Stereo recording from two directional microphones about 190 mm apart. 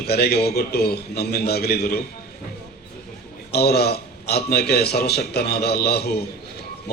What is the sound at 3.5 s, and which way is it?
Speech, 60° left (ahead or behind).